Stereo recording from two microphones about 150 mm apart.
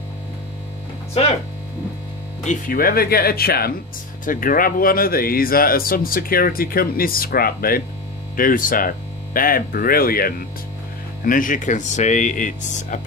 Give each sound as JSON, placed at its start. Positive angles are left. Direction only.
{"t": 2.4, "sound": "speech", "side_deg": 60}
{"t": 4.3, "sound": "speech", "side_deg": 65}
{"t": 8.4, "sound": "speech", "side_deg": 65}
{"t": 11.2, "sound": "speech", "side_deg": 65}